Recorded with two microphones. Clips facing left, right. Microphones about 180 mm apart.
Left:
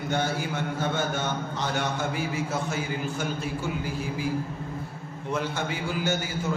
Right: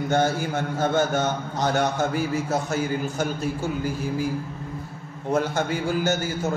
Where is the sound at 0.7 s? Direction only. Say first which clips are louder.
Right 8 dB; 45° right (ahead or behind).